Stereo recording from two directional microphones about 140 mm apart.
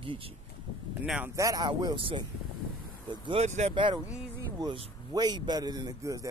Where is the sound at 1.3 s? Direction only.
25° right (ahead or behind).